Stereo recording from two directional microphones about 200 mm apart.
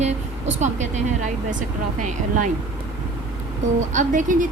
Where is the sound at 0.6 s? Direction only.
35° right (ahead or behind).